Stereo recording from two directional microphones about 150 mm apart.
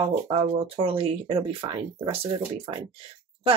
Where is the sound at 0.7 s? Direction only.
40° right (ahead or behind).